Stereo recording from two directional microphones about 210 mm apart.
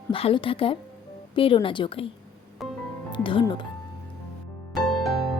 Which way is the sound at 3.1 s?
25° left (ahead or behind).